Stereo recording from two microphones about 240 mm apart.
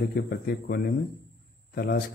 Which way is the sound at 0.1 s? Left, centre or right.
Left.